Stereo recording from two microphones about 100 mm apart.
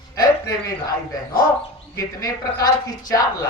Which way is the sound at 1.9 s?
35° left (ahead or behind).